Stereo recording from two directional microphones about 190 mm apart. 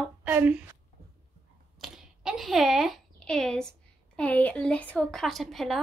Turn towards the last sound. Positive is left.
turn(degrees=0)  # may be behind; listen again after turning